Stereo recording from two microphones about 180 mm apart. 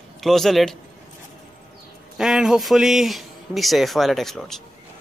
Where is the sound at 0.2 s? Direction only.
Centre (ahead or behind).